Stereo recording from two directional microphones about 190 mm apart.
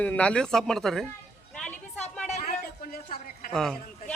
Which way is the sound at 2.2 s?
40° left (ahead or behind).